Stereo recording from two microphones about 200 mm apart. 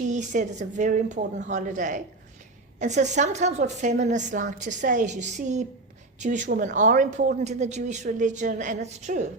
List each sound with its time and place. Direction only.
0.1 s a woman's voice: 35° right (ahead or behind)